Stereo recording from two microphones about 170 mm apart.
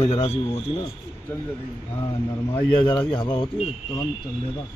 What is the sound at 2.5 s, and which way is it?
Speech, 30° left (ahead or behind).